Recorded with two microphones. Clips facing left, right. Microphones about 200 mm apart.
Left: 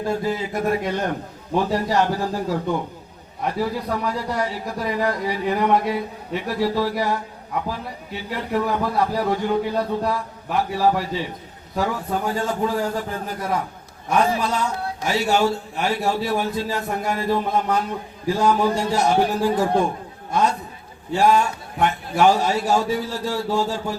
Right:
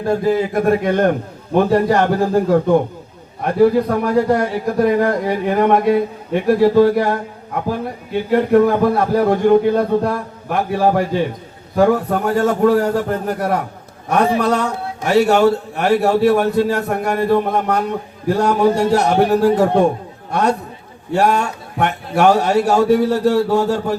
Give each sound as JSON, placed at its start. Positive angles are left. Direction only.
{"t": 0.3, "sound": "a man's voice", "side_deg": -55}